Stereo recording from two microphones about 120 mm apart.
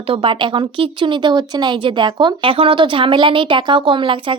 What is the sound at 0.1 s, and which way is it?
Speech, 50° right (ahead or behind).